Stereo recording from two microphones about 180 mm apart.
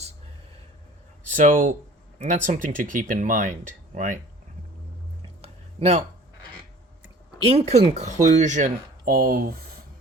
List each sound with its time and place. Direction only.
1.4 s speech: 50° right (ahead or behind)
5.4 s a sound: 35° right (ahead or behind)
7.4 s speech: 35° right (ahead or behind); by 9.6 s 55° right (ahead or behind)